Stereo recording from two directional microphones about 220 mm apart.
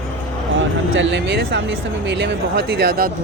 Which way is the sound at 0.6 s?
60° right (ahead or behind).